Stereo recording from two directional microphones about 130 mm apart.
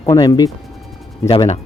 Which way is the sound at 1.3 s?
50° left (ahead or behind).